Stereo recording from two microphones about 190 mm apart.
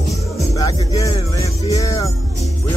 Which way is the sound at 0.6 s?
20° left (ahead or behind).